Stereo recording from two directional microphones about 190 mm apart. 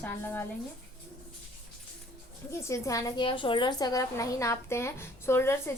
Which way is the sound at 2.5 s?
15° left (ahead or behind).